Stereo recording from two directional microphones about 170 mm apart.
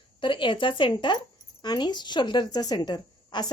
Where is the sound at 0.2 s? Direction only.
30° left (ahead or behind).